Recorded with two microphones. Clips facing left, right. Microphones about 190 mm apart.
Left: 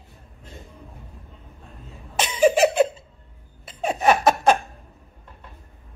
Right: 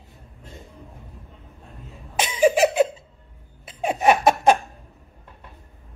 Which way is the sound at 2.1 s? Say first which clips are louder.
Even; 10° right (ahead or behind).